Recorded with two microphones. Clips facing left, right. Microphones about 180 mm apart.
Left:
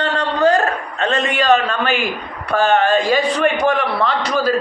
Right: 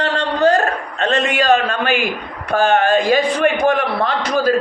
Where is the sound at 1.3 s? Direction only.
45° right (ahead or behind).